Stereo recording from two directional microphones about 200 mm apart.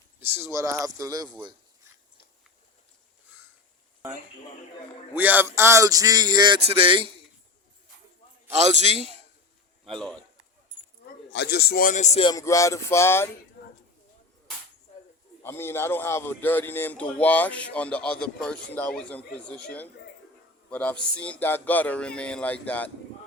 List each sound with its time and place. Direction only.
0.2 s speech: 15° right (ahead or behind)
5.1 s speech: 10° right (ahead or behind); by 7.1 s 25° right (ahead or behind)
8.5 s a man's voice: 35° right (ahead or behind)
9.8 s a man's voice: centre (ahead or behind)
11.3 s a man's voice: 55° left (ahead or behind); by 12.3 s 35° left (ahead or behind)
12.3 s speech: 15° left (ahead or behind)
15.4 s speech: 10° left (ahead or behind)
20.7 s speech: 5° left (ahead or behind)